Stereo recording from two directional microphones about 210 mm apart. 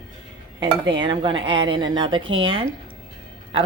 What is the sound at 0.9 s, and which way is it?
Speech, 20° right (ahead or behind).